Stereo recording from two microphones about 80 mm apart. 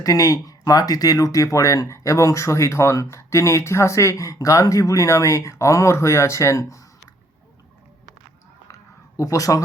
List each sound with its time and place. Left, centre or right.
0.0 s speech: left
9.1 s speech: left